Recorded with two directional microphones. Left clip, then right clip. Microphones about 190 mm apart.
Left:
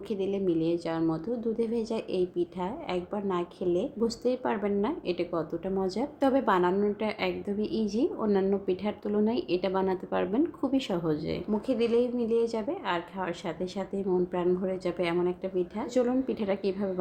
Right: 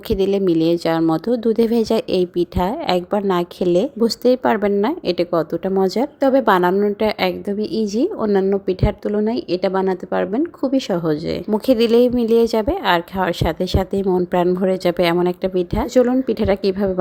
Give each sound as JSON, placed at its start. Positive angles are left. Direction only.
{"t": 0.1, "sound": "speech", "side_deg": -50}